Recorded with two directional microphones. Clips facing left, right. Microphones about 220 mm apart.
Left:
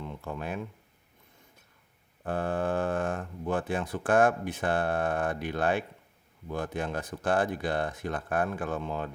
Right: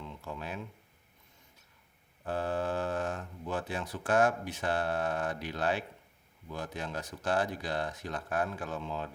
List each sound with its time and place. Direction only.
0.0 s speech: 55° left (ahead or behind)
2.2 s speech: 55° left (ahead or behind)